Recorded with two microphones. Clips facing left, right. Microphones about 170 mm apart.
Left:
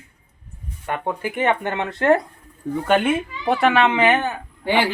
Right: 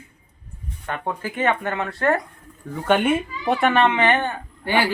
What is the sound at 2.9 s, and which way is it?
Speech, centre (ahead or behind).